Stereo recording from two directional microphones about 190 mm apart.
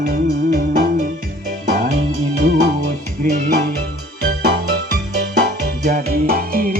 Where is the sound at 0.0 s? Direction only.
50° right (ahead or behind).